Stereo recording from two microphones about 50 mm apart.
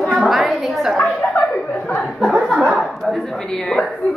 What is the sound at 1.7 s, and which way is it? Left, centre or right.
Speech, left.